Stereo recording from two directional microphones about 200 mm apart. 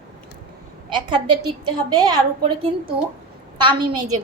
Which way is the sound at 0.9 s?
25° right (ahead or behind).